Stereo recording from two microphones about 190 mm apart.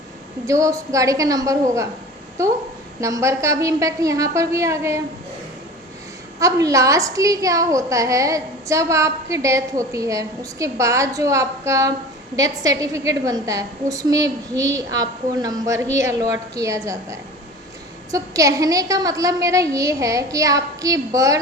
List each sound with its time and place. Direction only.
0.4 s a woman's voice: 15° right (ahead or behind)
3.0 s a woman's voice: 15° right (ahead or behind)
6.4 s a woman's voice: 15° right (ahead or behind)